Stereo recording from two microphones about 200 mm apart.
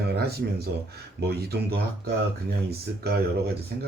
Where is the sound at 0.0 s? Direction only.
55° right (ahead or behind).